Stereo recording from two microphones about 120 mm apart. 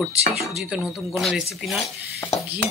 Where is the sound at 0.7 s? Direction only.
10° right (ahead or behind).